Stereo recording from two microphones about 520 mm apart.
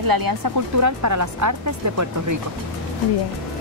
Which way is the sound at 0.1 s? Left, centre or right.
Right.